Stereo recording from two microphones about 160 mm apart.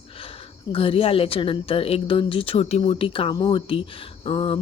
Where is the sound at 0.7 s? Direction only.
35° left (ahead or behind).